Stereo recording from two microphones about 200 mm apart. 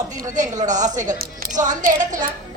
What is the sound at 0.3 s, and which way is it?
A woman's voice, 40° right (ahead or behind).